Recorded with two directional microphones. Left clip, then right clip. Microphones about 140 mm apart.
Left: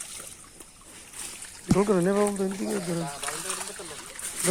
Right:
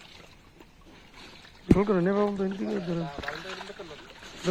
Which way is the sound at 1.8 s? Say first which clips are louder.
Left 5 dB; 30° left (ahead or behind).